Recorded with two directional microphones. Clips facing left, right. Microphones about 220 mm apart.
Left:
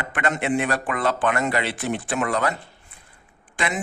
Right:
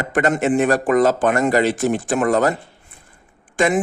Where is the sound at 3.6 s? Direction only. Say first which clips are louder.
Right 10 dB; 45° right (ahead or behind).